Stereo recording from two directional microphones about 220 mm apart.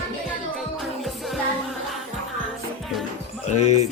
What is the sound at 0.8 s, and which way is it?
Music, centre (ahead or behind).